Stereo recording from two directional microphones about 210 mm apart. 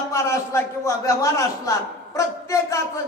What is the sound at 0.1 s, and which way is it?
A man's voice, 15° left (ahead or behind).